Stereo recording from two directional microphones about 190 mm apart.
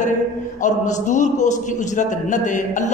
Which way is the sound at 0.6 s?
40° left (ahead or behind).